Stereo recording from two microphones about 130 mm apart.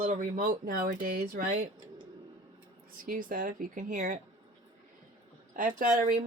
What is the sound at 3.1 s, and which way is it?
Speech, 90° right.